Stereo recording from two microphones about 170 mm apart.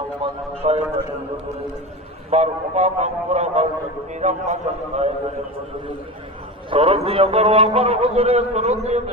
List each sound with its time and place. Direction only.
0.2 s a man's voice: 35° right (ahead or behind)
2.3 s a man's voice: 40° right (ahead or behind)
6.7 s a man's voice: 30° right (ahead or behind)